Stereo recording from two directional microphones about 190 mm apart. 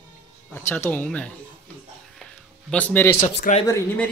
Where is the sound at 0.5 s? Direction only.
10° left (ahead or behind).